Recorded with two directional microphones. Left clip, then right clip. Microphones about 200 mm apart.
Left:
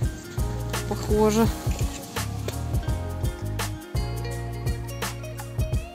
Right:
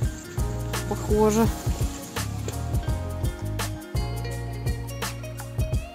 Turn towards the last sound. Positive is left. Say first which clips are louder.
# even
turn(degrees=0)  # may be behind; listen again after turning